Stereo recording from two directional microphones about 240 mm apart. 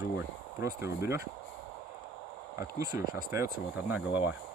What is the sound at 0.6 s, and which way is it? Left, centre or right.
Speech, centre.